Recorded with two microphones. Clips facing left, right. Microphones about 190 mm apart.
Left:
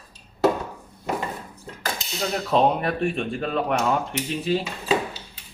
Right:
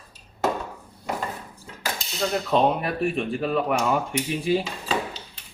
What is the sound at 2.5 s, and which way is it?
Speech, centre (ahead or behind).